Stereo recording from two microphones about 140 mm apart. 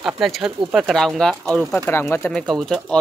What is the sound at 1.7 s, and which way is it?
Speech, 15° left (ahead or behind).